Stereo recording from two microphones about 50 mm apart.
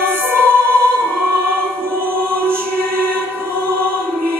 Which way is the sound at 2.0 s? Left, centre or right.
Right.